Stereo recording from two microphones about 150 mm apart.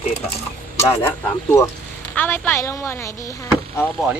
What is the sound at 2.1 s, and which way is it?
Speech, 15° left (ahead or behind).